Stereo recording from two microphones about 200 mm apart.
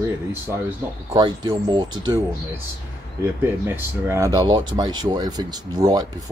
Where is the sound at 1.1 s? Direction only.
20° right (ahead or behind).